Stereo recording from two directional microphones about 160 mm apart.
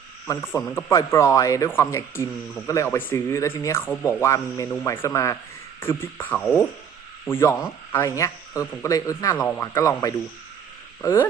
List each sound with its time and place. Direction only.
0.3 s a man's voice: 15° left (ahead or behind)